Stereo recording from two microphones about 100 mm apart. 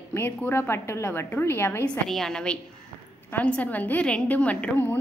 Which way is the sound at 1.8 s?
10° left (ahead or behind).